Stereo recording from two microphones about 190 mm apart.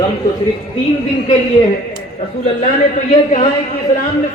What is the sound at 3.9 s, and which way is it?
Speech, 45° left (ahead or behind).